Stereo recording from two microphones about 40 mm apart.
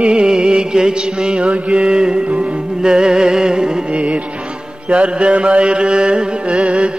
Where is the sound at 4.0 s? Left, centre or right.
Right.